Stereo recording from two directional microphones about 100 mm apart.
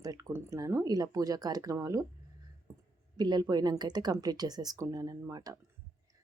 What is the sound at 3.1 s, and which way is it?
Speech, 45° right (ahead or behind).